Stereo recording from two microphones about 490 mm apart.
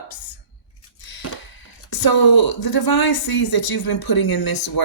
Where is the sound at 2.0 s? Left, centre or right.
Left.